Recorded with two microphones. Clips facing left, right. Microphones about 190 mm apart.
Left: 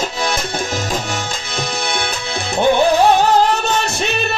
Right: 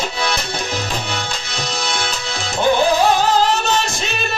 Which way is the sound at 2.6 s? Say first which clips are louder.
Left 2 dB; 60° left (ahead or behind).